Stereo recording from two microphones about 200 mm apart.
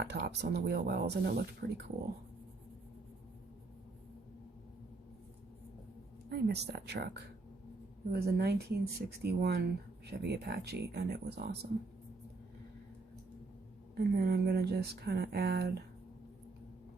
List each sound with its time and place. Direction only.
0.0 s speech: 55° right (ahead or behind)
6.2 s speech: 55° right (ahead or behind)
13.9 s speech: 55° right (ahead or behind)